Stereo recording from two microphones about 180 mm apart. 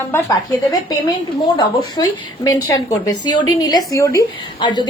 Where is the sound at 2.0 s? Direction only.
25° left (ahead or behind).